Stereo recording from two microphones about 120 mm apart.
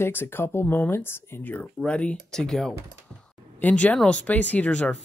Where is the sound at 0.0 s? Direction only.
20° left (ahead or behind).